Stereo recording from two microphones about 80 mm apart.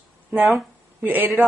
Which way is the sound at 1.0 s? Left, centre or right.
Right.